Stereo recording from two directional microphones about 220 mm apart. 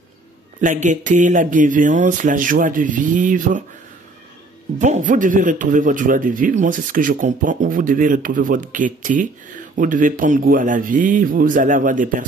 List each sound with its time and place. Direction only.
0.6 s a man's voice: 35° right (ahead or behind)
4.7 s a man's voice: 35° right (ahead or behind)